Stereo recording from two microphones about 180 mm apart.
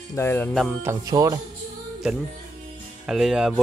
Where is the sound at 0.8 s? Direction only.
20° right (ahead or behind).